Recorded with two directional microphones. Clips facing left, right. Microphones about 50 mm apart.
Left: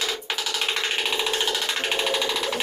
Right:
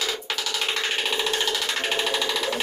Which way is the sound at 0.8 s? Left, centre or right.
Centre.